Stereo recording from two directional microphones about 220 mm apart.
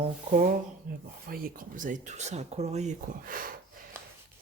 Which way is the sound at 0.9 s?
40° right (ahead or behind).